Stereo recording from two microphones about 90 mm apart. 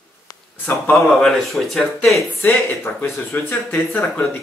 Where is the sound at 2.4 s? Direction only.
30° left (ahead or behind).